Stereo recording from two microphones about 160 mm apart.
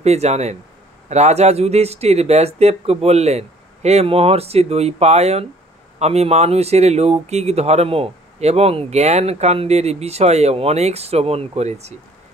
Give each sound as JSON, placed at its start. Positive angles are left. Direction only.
{"t": 0.0, "sound": "speech", "side_deg": -45}